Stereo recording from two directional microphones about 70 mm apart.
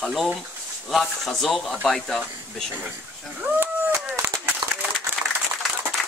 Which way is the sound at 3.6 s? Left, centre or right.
Right.